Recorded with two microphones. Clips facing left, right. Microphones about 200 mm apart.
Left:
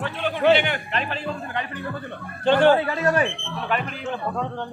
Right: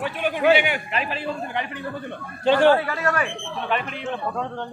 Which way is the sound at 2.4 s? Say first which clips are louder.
Even; centre (ahead or behind).